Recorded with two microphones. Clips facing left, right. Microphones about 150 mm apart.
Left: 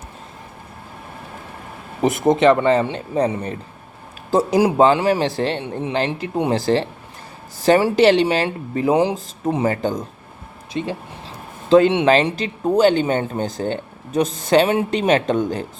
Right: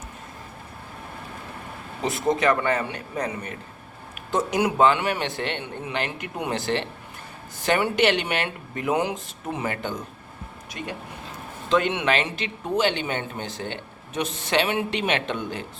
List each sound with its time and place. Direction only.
2.0 s speech: 20° left (ahead or behind)
10.8 s speech: 25° left (ahead or behind); by 15.6 s 40° left (ahead or behind)